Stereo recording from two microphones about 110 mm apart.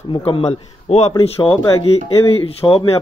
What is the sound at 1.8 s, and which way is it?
Speech, 65° left (ahead or behind).